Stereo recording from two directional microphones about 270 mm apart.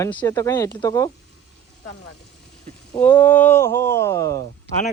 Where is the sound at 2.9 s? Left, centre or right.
Centre.